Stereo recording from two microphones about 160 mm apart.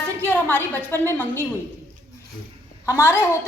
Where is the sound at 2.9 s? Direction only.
15° left (ahead or behind).